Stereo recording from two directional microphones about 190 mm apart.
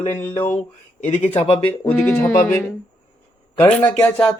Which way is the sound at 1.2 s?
35° left (ahead or behind).